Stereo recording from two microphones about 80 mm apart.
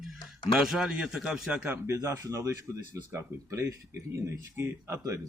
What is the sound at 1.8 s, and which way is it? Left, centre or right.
Speech, right.